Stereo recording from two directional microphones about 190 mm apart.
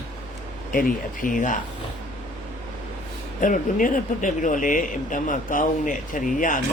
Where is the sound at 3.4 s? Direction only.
45° left (ahead or behind).